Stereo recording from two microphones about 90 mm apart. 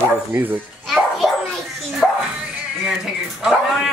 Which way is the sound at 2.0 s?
Centre (ahead or behind).